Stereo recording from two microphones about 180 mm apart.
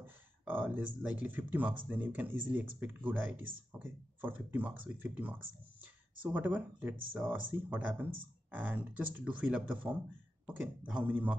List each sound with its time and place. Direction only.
0.0 s speech: 10° right (ahead or behind)